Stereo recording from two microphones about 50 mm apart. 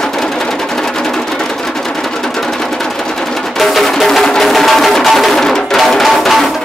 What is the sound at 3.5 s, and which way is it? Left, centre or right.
Music, centre.